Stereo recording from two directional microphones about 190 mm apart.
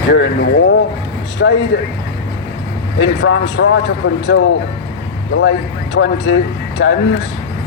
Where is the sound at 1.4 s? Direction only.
70° left (ahead or behind).